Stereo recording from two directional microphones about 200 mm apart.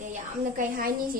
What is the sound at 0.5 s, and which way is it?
Speech, 45° right (ahead or behind).